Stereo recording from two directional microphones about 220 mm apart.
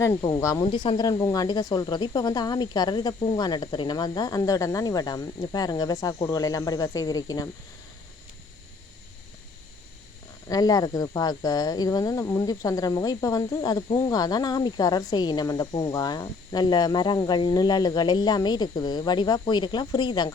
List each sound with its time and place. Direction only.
0.1 s speech: 20° left (ahead or behind)
10.5 s speech: 15° left (ahead or behind)